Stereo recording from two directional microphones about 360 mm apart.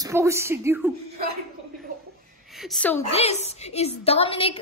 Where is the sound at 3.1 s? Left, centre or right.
Centre.